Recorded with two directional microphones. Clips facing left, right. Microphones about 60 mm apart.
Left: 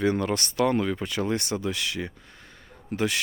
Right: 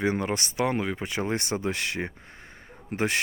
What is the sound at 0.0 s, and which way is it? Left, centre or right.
Speech, right.